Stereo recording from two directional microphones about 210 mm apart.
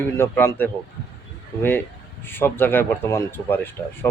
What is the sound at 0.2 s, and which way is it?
Speech, 10° left (ahead or behind).